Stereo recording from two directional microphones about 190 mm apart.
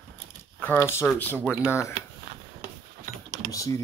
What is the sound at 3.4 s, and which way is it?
Speech, 15° left (ahead or behind).